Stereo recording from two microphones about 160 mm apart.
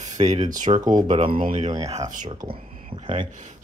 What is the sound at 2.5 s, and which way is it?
Speech, 35° right (ahead or behind).